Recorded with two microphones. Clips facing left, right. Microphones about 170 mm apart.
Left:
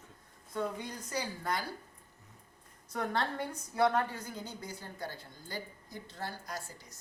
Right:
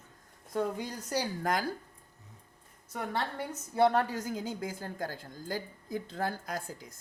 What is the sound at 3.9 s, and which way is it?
A woman's voice, 90° right.